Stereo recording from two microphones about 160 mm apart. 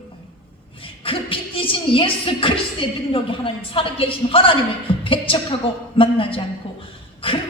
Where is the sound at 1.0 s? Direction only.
35° left (ahead or behind).